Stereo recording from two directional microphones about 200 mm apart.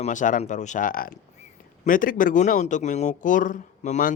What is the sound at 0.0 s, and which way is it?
Speech, 40° left (ahead or behind).